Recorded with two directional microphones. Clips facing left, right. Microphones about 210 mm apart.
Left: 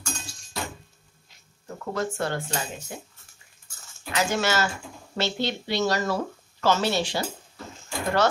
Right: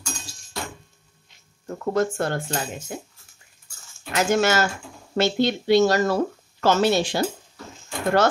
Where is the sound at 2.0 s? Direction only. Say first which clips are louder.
Right 5 dB; 45° right (ahead or behind).